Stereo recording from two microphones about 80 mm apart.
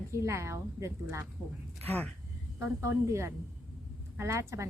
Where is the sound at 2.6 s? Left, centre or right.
Right.